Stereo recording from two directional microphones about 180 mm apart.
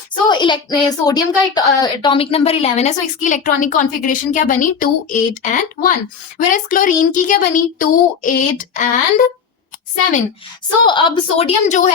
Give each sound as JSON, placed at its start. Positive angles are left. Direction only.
{"t": 0.3, "sound": "a woman's voice", "side_deg": 25}
{"t": 10.8, "sound": "a woman's voice", "side_deg": 25}